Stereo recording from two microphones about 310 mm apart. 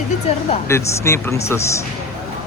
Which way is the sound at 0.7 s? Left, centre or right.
Centre.